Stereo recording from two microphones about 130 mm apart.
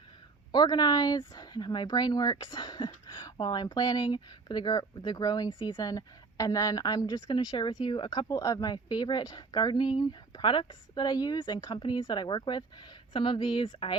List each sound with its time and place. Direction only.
0.5 s speech: 35° left (ahead or behind)
8.3 s speech: 25° left (ahead or behind)